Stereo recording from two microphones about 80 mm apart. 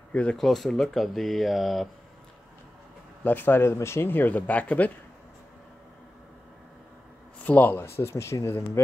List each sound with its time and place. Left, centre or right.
0.1 s speech: centre
0.4 s speech: centre
3.3 s speech: left
7.4 s speech: left